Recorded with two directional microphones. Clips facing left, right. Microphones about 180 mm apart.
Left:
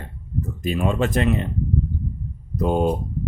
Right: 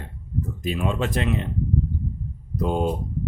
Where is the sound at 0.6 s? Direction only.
45° left (ahead or behind).